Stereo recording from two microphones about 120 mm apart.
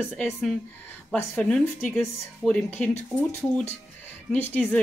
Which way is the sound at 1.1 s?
15° left (ahead or behind).